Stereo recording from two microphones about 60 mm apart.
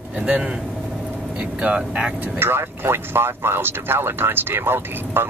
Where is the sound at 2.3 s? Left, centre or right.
Right.